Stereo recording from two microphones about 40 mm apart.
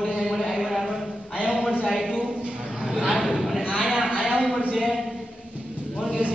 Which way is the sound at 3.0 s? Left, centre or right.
Centre.